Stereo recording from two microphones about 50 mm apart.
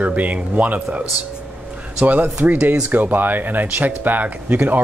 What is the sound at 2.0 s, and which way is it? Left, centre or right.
Speech, right.